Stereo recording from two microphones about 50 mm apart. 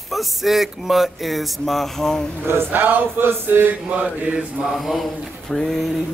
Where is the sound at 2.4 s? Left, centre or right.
Right.